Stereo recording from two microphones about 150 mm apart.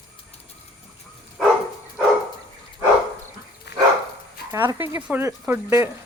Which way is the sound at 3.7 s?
90° left.